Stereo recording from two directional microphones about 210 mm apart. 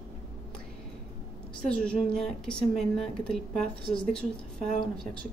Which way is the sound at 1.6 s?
5° left (ahead or behind).